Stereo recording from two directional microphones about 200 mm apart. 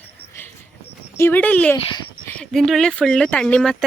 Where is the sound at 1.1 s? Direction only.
10° left (ahead or behind).